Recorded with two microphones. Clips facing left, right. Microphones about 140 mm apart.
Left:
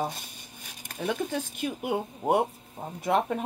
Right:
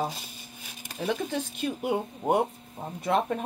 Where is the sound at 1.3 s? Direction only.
10° left (ahead or behind).